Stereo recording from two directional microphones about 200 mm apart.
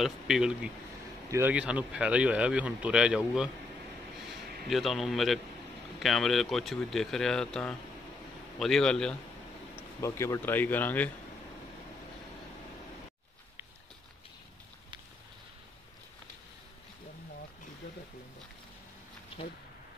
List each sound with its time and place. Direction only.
0.0 s speech: 5° right (ahead or behind)
4.6 s speech: centre (ahead or behind)
9.9 s speech: 15° left (ahead or behind)